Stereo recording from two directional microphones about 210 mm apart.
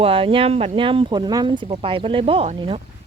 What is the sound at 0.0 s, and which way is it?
Speech, 25° right (ahead or behind).